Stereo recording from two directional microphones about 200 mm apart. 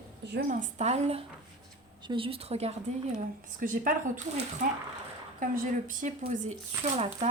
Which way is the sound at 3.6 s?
40° right (ahead or behind).